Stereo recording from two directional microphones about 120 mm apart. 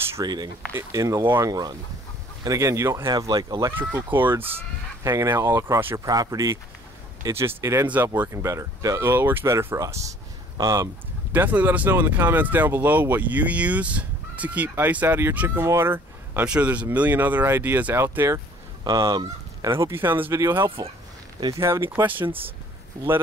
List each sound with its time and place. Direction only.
0.2 s speech: 35° right (ahead or behind)
1.5 s speech: 35° right (ahead or behind)
3.9 s speech: 15° right (ahead or behind)
11.3 s speech: 15° right (ahead or behind)
18.9 s fowl: 35° right (ahead or behind)
19.7 s speech: 20° right (ahead or behind)